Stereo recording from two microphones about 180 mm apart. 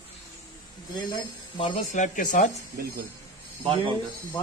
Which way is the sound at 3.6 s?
25° right (ahead or behind).